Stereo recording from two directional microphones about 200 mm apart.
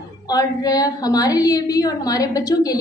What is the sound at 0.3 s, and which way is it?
A woman's voice, 20° left (ahead or behind).